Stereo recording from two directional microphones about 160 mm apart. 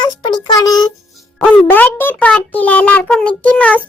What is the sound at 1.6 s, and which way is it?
A child's voice, 10° left (ahead or behind).